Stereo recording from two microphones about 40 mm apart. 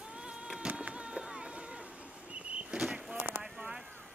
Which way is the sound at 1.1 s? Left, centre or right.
Centre.